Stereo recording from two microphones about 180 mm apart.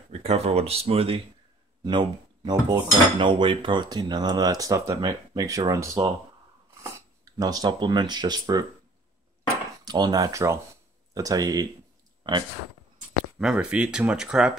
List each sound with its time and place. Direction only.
0.2 s speech: 35° right (ahead or behind)
1.9 s dishes: 25° right (ahead or behind)
6.8 s speech: 20° right (ahead or behind)
9.8 s dishes: 20° right (ahead or behind)
12.2 s clicking: 25° right (ahead or behind)
13.4 s speech: 5° right (ahead or behind)